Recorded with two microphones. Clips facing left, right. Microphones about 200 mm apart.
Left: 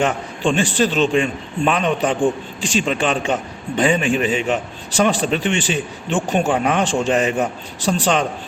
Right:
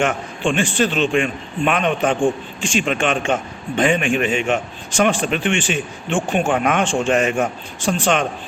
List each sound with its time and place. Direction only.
0.0 s a man's voice: 35° left (ahead or behind)